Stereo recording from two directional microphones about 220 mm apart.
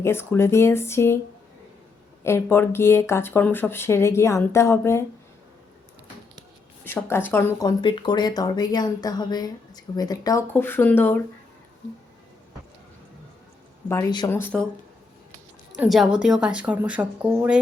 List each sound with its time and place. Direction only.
0.0 s speech: 10° left (ahead or behind)
2.2 s speech: 10° left (ahead or behind)
6.8 s speech: 10° left (ahead or behind)
13.8 s speech: 15° left (ahead or behind)
15.7 s a woman's voice: centre (ahead or behind)